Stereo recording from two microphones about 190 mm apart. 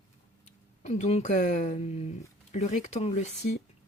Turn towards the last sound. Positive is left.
turn(degrees=35)  # may be behind; listen again after turning